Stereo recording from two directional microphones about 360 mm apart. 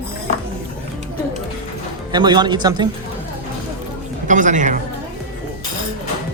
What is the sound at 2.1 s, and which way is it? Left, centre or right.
Speech, centre.